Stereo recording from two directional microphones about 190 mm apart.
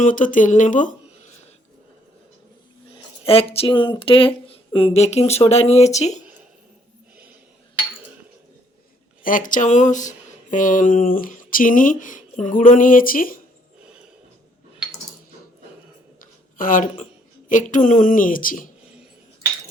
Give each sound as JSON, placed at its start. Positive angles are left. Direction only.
{"t": 0.0, "sound": "speech", "side_deg": 45}
{"t": 3.2, "sound": "speech", "side_deg": 30}
{"t": 9.2, "sound": "speech", "side_deg": 45}
{"t": 16.6, "sound": "speech", "side_deg": 45}